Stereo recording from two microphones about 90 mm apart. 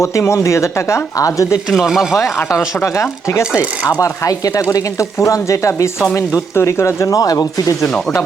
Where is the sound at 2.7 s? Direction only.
35° left (ahead or behind).